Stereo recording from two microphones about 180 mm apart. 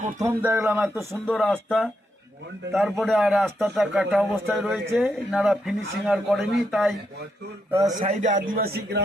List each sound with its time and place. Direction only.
0.2 s speech: 15° right (ahead or behind)
1.2 s a man's voice: 5° left (ahead or behind)
7.7 s speech: 15° right (ahead or behind)
7.9 s a man's voice: 40° right (ahead or behind); by 9.0 s 60° right (ahead or behind)